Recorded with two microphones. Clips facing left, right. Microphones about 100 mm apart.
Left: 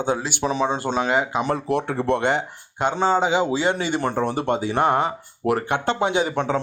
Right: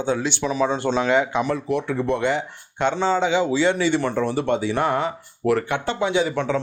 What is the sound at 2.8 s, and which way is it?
Speech, 45° left (ahead or behind).